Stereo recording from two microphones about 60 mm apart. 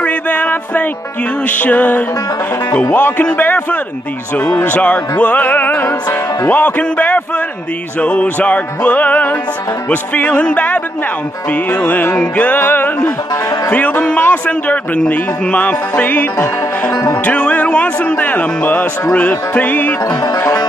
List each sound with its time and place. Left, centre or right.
0.0 s music: left
15.9 s music: left